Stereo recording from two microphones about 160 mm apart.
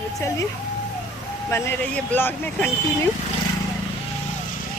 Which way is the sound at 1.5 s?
15° left (ahead or behind).